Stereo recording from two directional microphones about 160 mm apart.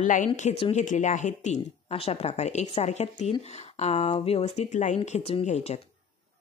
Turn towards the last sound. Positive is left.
turn(degrees=45)  # may be behind; listen again after turning